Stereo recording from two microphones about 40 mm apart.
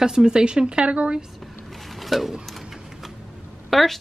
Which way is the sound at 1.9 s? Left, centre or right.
Centre.